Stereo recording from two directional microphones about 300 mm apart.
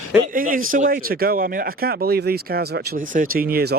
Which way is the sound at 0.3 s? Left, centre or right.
Right.